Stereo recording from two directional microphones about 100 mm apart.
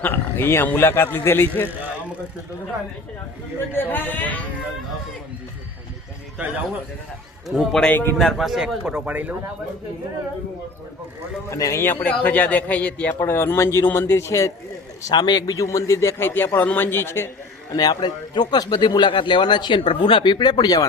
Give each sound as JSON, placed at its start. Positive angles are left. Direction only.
{"t": 0.0, "sound": "a man's voice", "side_deg": 25}
{"t": 3.7, "sound": "a man's voice", "side_deg": 20}
{"t": 7.4, "sound": "a man's voice", "side_deg": -5}
{"t": 7.8, "sound": "a man's voice", "side_deg": 15}
{"t": 8.2, "sound": "a man's voice", "side_deg": 0}
{"t": 11.4, "sound": "a man's voice", "side_deg": 30}
{"t": 13.1, "sound": "a man's voice", "side_deg": 25}
{"t": 15.1, "sound": "a man's voice", "side_deg": 45}
{"t": 17.7, "sound": "a man's voice", "side_deg": 40}